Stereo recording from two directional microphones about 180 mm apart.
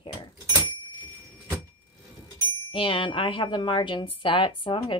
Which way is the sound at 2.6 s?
30° left (ahead or behind).